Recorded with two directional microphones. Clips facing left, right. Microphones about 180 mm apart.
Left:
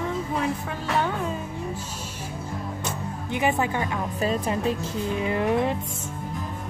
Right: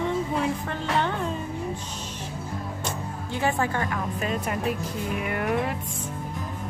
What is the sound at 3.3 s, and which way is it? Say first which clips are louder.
Speech: left 1 dB; 20° left (ahead or behind).